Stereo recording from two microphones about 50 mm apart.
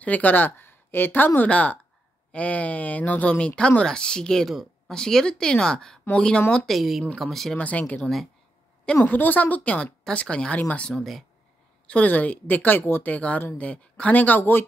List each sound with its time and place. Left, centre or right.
0.0 s a woman's voice: left
0.5 s speech: left
1.5 s speech: left; by 4.5 s centre
4.5 s a sound: centre
4.9 s speech: centre
6.7 s speech: centre
7.5 s a woman's voice: left
10.2 s speech: centre
10.5 s a woman's voice: left
10.9 s speech: centre
11.9 s a woman's voice: left
13.6 s a woman's voice: left